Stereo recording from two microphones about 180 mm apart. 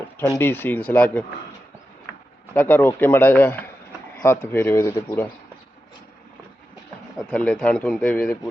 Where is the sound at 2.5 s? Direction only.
10° left (ahead or behind).